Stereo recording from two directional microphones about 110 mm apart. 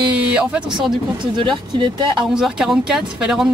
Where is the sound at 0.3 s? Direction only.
10° right (ahead or behind).